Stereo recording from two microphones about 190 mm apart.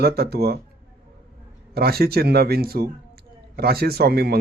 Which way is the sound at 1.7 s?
55° right (ahead or behind).